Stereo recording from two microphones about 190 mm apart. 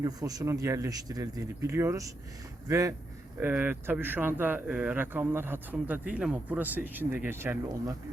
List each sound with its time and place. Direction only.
0.0 s speech: 20° right (ahead or behind)